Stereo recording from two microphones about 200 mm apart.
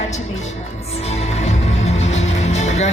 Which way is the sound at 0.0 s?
35° left (ahead or behind).